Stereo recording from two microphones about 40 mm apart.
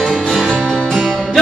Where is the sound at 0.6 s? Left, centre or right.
Centre.